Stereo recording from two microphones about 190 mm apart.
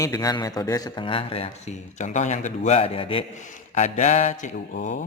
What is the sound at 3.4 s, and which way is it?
A man's voice, 40° left (ahead or behind).